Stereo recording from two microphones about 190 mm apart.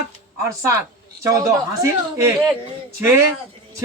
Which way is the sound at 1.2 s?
15° right (ahead or behind).